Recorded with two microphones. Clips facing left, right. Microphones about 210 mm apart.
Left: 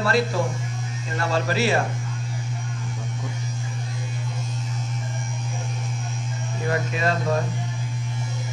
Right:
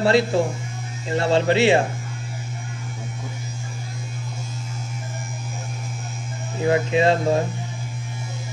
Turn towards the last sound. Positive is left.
turn(degrees=-30)  # may be behind; listen again after turning